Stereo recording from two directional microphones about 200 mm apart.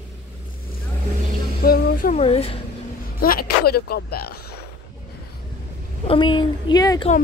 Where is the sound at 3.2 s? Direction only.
50° left (ahead or behind).